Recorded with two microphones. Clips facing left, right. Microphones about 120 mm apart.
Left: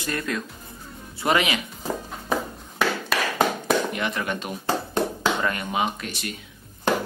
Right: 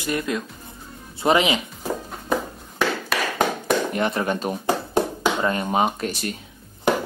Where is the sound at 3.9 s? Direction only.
35° right (ahead or behind).